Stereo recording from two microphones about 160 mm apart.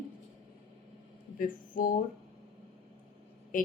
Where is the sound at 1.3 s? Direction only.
60° left (ahead or behind).